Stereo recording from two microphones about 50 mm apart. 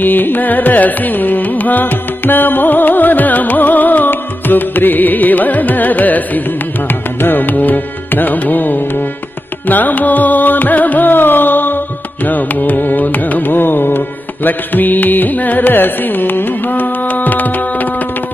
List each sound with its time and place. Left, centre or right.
0.0 s carnatic music: left
7.2 s music: left
12.3 s carnatic music: left